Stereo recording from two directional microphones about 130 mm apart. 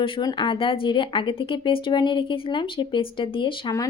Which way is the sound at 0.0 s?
40° left (ahead or behind).